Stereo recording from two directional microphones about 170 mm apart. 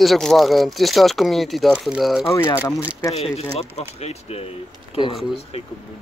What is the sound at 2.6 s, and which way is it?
Speech, 10° right (ahead or behind).